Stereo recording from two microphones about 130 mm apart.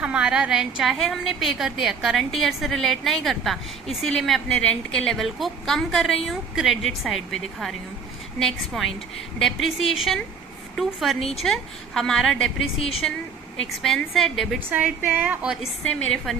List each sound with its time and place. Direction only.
0.0 s a woman's voice: 5° right (ahead or behind)
11.2 s speech: 50° left (ahead or behind)
11.4 s a woman's voice: 5° left (ahead or behind)
14.7 s a woman's voice: 10° right (ahead or behind)
15.8 s a woman's voice: 10° left (ahead or behind)